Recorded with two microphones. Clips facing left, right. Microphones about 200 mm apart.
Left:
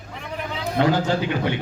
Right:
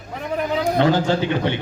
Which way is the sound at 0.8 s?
25° right (ahead or behind).